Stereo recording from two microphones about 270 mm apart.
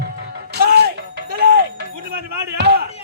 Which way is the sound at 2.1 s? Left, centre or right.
Right.